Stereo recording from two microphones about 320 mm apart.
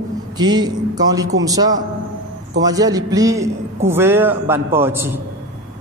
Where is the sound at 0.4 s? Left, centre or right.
Centre.